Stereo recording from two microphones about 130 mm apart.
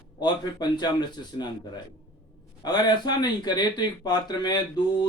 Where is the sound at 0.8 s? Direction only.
30° left (ahead or behind).